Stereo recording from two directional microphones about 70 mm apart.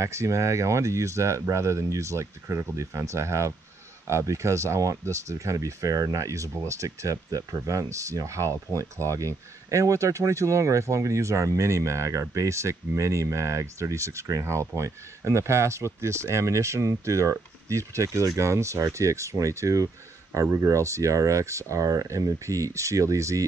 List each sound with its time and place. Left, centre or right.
0.0 s speech: right